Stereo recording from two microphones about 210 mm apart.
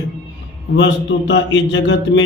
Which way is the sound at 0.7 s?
55° left (ahead or behind).